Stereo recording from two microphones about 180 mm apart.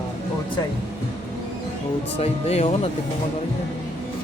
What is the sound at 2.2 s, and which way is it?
Speech, 35° left (ahead or behind).